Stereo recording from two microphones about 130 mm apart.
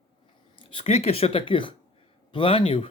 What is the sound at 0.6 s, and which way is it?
Speech, 45° left (ahead or behind).